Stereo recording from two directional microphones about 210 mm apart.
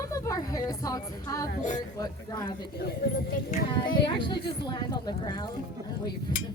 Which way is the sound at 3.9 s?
25° left (ahead or behind).